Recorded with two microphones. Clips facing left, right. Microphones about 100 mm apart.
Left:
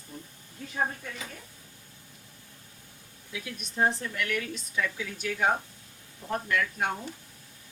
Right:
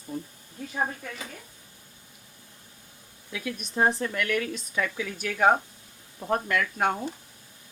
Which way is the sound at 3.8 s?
55° right (ahead or behind).